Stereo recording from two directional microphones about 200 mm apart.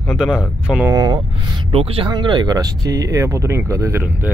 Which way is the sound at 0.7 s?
5° right (ahead or behind).